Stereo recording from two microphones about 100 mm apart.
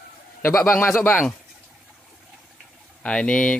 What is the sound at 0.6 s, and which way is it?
Speech, 20° left (ahead or behind).